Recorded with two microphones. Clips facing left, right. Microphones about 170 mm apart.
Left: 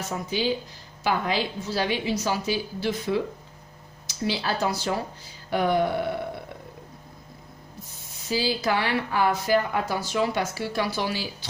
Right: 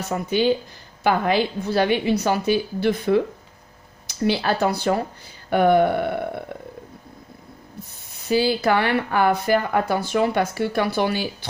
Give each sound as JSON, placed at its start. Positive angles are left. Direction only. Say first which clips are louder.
{"t": 0.0, "sound": "speech", "louder": "right 6 dB", "side_deg": -60}
{"t": 8.1, "sound": "speech", "louder": "right 6 dB", "side_deg": -60}